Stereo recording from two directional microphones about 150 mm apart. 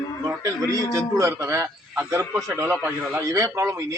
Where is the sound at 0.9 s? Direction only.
20° right (ahead or behind).